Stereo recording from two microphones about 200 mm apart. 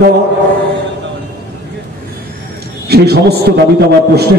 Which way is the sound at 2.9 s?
55° right (ahead or behind).